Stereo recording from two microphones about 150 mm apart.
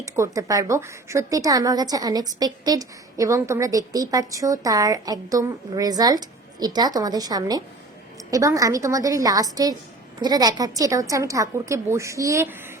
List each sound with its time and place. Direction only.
0.0 s a woman's voice: 20° right (ahead or behind)